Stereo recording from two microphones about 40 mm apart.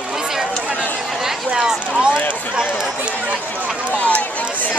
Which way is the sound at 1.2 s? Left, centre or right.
Centre.